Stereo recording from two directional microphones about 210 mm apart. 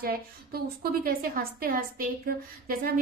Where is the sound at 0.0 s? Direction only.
45° right (ahead or behind).